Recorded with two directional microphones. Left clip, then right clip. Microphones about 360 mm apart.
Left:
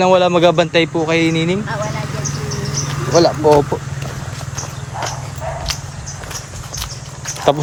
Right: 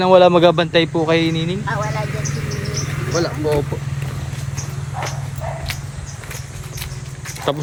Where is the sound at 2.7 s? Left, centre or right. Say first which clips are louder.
Left 8 dB; centre.